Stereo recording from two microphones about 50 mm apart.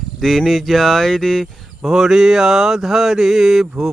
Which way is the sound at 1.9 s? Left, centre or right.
Centre.